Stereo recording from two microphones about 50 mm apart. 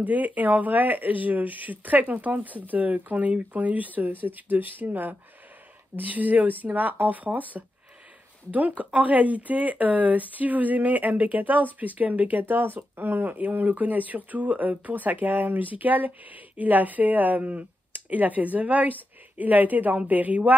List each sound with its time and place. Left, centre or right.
0.0 s speech: right